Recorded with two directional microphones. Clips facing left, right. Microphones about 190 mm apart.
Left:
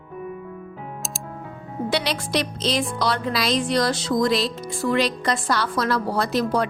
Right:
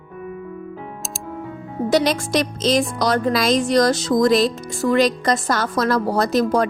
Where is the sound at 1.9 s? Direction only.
45° right (ahead or behind).